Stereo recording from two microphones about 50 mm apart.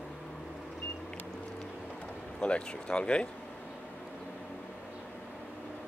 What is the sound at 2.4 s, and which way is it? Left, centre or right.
Speech, left.